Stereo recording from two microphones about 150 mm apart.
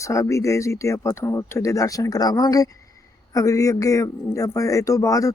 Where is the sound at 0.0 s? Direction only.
20° left (ahead or behind).